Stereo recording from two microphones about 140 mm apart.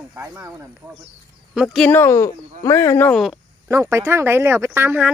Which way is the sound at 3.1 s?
Centre (ahead or behind).